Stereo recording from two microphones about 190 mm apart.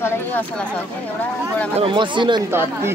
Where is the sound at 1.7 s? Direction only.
30° right (ahead or behind).